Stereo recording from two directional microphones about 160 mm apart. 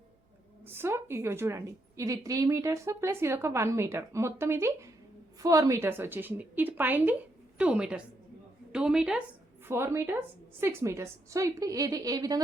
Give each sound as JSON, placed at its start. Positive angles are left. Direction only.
{"t": 0.6, "sound": "a woman's voice", "side_deg": -15}
{"t": 9.6, "sound": "a woman's voice", "side_deg": -15}